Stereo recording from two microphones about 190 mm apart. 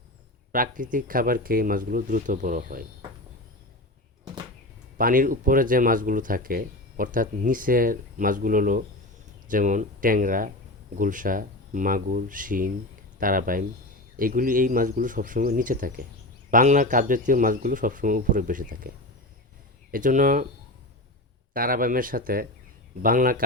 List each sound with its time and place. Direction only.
0.5 s speech: 45° right (ahead or behind)
4.9 s speech: 45° right (ahead or behind)
19.9 s speech: 45° right (ahead or behind)
21.5 s speech: 50° right (ahead or behind)